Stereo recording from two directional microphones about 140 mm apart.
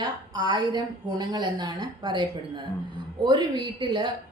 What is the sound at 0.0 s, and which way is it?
Speech, 30° right (ahead or behind).